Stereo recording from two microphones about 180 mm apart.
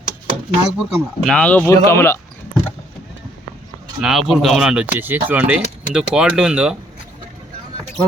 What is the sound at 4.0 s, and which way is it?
Speech, centre (ahead or behind).